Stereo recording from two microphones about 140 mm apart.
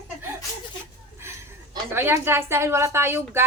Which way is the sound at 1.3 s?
15° right (ahead or behind).